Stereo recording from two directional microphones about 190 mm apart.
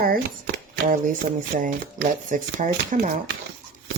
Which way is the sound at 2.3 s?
45° right (ahead or behind).